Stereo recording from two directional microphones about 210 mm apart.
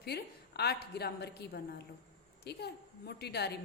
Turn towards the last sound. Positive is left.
turn(degrees=50)  # may be behind; listen again after turning